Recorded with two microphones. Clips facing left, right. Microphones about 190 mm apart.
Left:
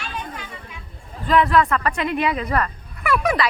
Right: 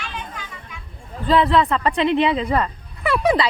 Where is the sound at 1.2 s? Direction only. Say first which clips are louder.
Right 1 dB; 30° right (ahead or behind).